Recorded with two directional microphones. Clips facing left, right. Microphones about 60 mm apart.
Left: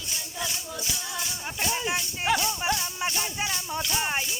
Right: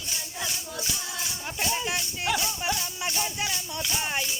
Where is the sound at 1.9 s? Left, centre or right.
Left.